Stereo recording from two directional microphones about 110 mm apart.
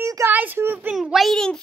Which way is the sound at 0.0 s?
25° right (ahead or behind).